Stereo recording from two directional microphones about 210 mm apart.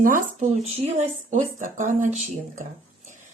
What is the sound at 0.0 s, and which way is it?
Speech, 40° right (ahead or behind).